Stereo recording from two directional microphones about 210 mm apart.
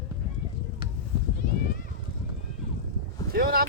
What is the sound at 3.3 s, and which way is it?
Speech, 45° right (ahead or behind).